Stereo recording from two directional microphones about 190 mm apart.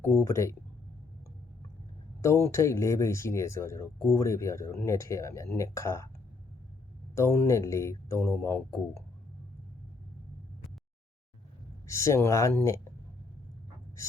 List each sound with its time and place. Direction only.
0.0 s speech: 15° left (ahead or behind)
2.2 s speech: 15° left (ahead or behind)
7.2 s speech: 15° left (ahead or behind)
11.9 s speech: 15° left (ahead or behind)